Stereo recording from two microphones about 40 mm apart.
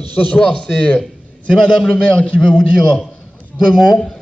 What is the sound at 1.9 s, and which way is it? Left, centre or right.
Speech, left.